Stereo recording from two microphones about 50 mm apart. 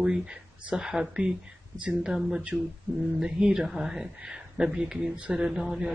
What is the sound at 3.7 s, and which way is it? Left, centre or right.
Speech, centre.